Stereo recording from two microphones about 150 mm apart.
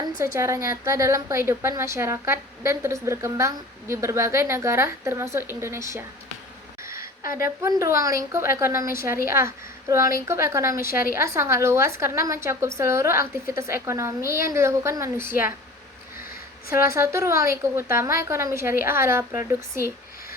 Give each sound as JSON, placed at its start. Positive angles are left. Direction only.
{"t": 0.3, "sound": "a woman's voice", "side_deg": -20}
{"t": 7.3, "sound": "speech", "side_deg": 70}
{"t": 7.6, "sound": "a woman's voice", "side_deg": -20}
{"t": 16.9, "sound": "a woman's voice", "side_deg": -20}